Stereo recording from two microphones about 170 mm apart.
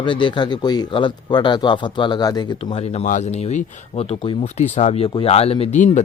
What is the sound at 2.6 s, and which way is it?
A man's voice, 35° left (ahead or behind).